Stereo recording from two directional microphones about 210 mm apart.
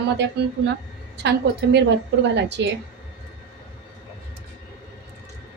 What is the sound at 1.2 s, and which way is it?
A woman's voice, 55° right (ahead or behind).